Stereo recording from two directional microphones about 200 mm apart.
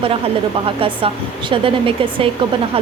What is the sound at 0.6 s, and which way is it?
Speech, 25° right (ahead or behind).